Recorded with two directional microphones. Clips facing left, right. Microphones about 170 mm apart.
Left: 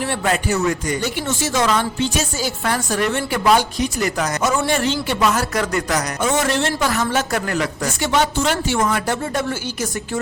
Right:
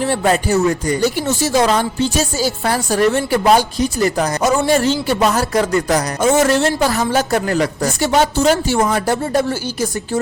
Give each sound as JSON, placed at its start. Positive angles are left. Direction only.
{"t": 0.0, "sound": "speech", "side_deg": -35}